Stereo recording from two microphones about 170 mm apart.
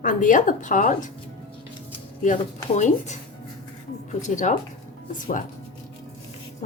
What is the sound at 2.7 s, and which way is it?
Speech, 45° left (ahead or behind).